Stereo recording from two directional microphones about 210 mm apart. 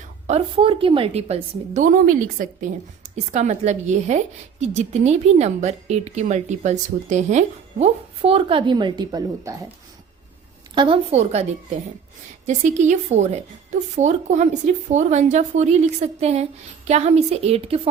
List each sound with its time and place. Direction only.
0.3 s a woman's voice: 25° right (ahead or behind)
10.8 s speech: 25° right (ahead or behind)
12.5 s speech: 35° right (ahead or behind)